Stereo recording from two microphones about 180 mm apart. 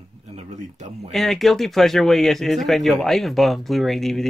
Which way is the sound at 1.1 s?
Centre (ahead or behind).